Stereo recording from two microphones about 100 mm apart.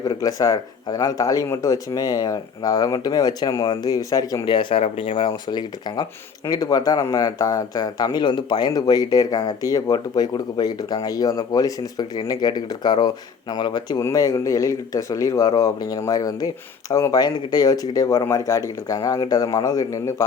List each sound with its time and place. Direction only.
0.0 s speech: 40° left (ahead or behind)
4.5 s speech: 65° left (ahead or behind)
5.5 s speech: 45° left (ahead or behind)
14.0 s speech: 35° left (ahead or behind)